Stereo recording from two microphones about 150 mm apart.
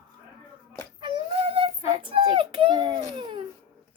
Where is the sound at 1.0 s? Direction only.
35° right (ahead or behind).